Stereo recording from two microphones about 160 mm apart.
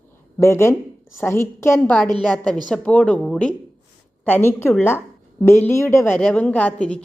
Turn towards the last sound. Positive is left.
turn(degrees=5)  # may be behind; listen again after turning